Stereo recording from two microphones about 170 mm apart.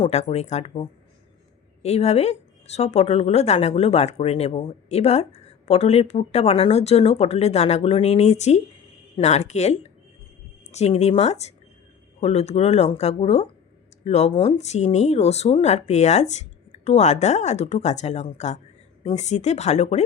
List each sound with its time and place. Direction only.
0.0 s speech: 40° left (ahead or behind)